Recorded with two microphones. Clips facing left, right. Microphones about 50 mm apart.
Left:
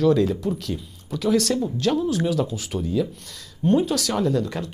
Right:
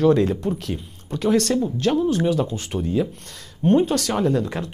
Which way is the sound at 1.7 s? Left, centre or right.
Right.